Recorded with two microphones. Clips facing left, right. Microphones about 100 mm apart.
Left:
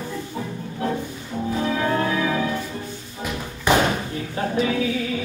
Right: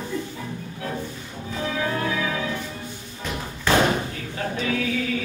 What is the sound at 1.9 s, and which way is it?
Music, 30° left (ahead or behind).